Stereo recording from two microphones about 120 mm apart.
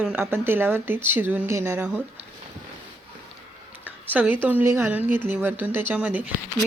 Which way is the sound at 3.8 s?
15° right (ahead or behind).